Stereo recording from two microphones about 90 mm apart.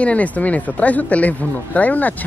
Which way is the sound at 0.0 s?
15° left (ahead or behind).